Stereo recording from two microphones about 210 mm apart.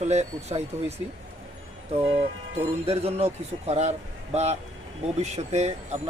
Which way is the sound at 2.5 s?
30° right (ahead or behind).